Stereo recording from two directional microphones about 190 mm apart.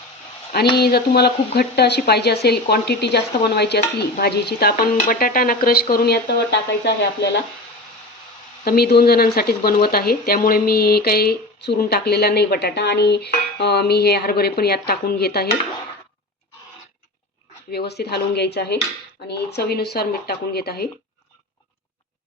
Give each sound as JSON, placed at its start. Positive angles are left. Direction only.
{"t": 0.8, "sound": "speech", "side_deg": 55}
{"t": 8.6, "sound": "speech", "side_deg": 55}
{"t": 17.7, "sound": "speech", "side_deg": 60}